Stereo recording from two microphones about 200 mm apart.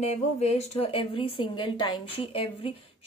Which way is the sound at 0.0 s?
35° left (ahead or behind).